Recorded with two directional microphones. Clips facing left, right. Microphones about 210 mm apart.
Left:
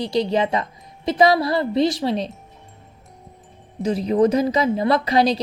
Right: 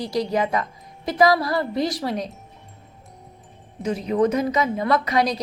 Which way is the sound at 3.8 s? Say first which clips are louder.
Left 3 dB; 35° left (ahead or behind).